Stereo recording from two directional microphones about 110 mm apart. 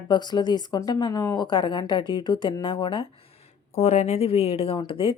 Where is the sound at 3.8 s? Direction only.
85° left; by 5.1 s 55° left (ahead or behind).